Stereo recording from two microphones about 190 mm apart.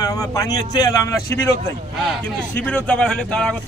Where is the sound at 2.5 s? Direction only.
5° left (ahead or behind).